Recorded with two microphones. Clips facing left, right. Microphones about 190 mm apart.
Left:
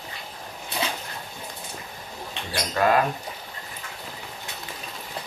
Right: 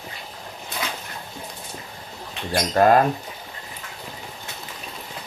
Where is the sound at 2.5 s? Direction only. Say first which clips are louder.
Right 5 dB; 40° right (ahead or behind).